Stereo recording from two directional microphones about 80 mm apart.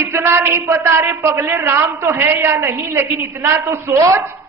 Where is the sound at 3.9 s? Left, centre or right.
Right.